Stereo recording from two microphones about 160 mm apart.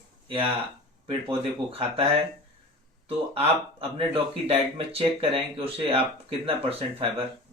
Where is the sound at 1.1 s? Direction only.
35° right (ahead or behind).